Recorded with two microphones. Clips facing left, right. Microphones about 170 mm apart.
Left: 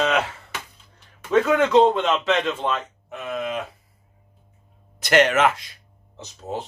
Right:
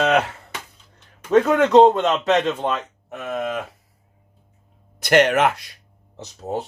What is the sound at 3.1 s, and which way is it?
Speech, 55° right (ahead or behind).